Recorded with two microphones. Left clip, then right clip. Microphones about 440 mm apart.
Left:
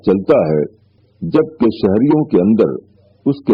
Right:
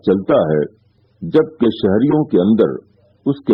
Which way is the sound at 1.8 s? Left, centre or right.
Left.